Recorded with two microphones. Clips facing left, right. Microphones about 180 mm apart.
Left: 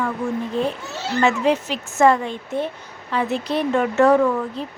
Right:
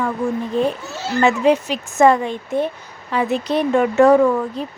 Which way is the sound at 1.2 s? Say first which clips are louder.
Right 3 dB; 15° right (ahead or behind).